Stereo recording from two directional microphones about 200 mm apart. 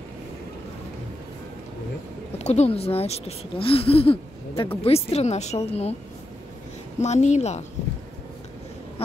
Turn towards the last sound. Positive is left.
turn(degrees=35)  # may be behind; listen again after turning